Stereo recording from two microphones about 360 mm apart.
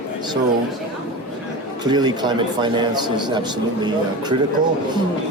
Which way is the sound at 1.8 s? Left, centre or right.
Centre.